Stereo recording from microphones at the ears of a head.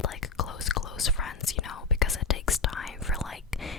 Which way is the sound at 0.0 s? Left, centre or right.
Left.